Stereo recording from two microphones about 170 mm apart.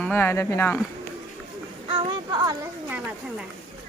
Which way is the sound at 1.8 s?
35° right (ahead or behind).